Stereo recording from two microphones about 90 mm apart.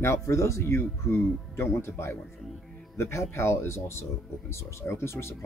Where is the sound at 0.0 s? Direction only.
30° left (ahead or behind).